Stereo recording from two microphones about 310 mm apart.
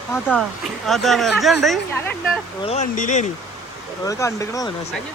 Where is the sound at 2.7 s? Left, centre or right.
Left.